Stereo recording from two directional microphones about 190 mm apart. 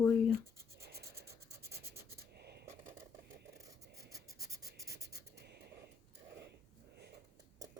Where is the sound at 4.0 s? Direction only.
15° right (ahead or behind).